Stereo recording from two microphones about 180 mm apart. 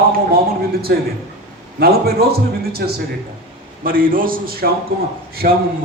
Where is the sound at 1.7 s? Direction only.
60° right (ahead or behind).